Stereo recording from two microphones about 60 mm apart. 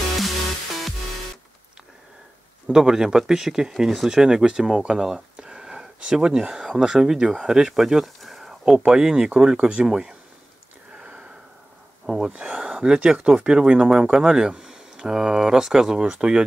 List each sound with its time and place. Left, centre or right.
2.7 s speech: centre
11.0 s sniff: centre
12.3 s speech: right